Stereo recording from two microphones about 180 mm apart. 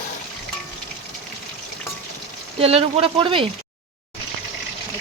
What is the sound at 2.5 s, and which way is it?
Speech, 35° right (ahead or behind).